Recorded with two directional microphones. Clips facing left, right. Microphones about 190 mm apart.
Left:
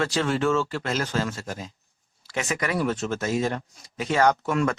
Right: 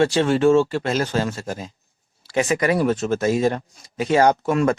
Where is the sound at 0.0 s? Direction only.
25° right (ahead or behind).